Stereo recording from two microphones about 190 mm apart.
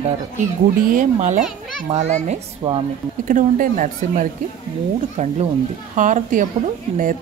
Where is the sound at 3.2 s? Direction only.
45° right (ahead or behind).